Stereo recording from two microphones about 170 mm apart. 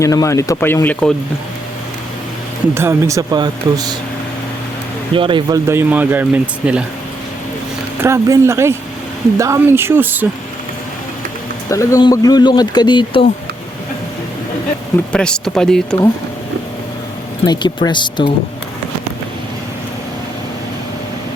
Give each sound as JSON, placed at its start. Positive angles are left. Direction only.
{"t": 0.0, "sound": "speech", "side_deg": 20}
{"t": 2.7, "sound": "speech", "side_deg": -15}
{"t": 5.1, "sound": "speech", "side_deg": -30}
{"t": 5.6, "sound": "speech", "side_deg": -10}
{"t": 8.0, "sound": "speech", "side_deg": -15}
{"t": 11.7, "sound": "speech", "side_deg": 20}
{"t": 15.1, "sound": "speech", "side_deg": 5}
{"t": 17.4, "sound": "speech", "side_deg": 25}